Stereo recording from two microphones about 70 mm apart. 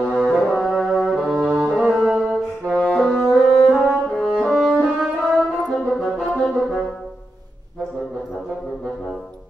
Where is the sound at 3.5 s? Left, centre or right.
Centre.